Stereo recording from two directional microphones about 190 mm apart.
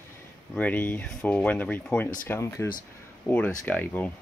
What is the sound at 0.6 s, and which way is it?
Speech, 10° left (ahead or behind).